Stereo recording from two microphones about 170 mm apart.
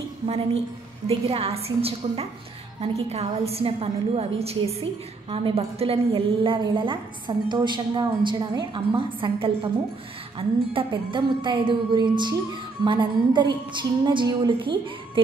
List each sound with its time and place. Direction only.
1.0 s a woman's voice: 35° right (ahead or behind)